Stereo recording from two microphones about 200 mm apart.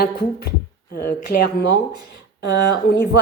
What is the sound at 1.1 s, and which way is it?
Speech, 55° left (ahead or behind).